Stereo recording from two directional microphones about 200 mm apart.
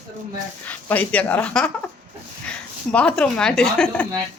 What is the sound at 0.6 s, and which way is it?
Speech, 10° left (ahead or behind).